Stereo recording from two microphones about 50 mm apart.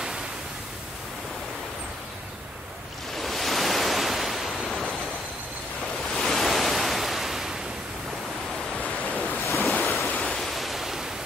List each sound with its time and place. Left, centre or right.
3.2 s waves: centre
6.1 s waves: centre
9.5 s waves: centre
9.8 s ocean: left
10.1 s pink noise: centre